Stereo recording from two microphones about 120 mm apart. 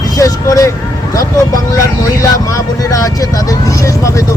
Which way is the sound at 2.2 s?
25° left (ahead or behind).